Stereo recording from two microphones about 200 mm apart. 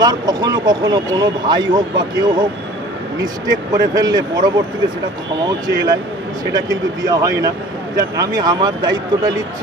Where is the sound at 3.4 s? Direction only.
20° right (ahead or behind).